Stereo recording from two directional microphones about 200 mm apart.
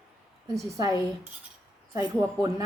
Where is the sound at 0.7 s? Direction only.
15° right (ahead or behind).